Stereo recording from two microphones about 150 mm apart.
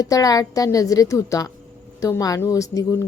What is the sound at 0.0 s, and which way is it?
A woman's voice, 25° left (ahead or behind).